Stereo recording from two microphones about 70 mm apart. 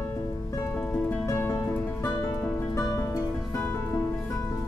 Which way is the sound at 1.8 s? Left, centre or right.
Left.